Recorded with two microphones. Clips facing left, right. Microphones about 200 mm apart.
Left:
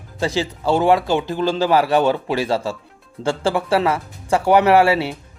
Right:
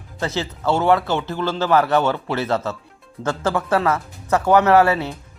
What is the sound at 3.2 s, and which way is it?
Speech, 30° left (ahead or behind).